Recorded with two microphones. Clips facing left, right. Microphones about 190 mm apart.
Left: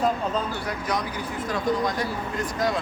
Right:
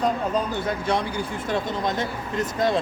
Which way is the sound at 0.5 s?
25° right (ahead or behind).